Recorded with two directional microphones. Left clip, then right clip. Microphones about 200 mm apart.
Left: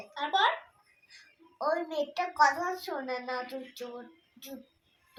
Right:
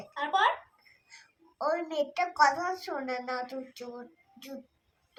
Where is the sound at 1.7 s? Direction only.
30° right (ahead or behind).